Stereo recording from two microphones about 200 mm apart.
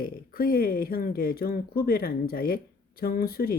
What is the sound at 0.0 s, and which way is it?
Speech, 45° left (ahead or behind).